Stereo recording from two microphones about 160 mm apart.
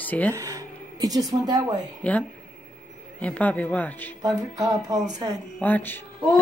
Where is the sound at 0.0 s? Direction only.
10° left (ahead or behind).